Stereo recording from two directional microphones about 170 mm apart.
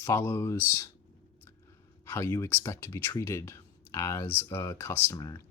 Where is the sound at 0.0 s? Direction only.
15° left (ahead or behind).